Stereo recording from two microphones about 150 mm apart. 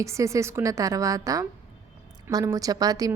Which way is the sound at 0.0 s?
20° right (ahead or behind).